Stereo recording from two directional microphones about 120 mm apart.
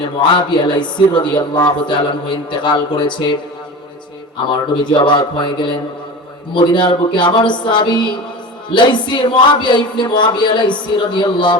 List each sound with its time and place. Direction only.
0.2 s speech: 40° left (ahead or behind)
4.8 s speech: 40° left (ahead or behind)